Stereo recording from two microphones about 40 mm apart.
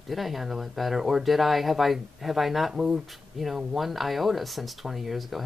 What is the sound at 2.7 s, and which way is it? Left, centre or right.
Speech, centre.